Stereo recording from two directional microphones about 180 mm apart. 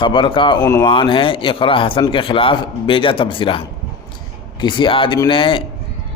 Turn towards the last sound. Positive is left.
turn(degrees=30)  # may be behind; listen again after turning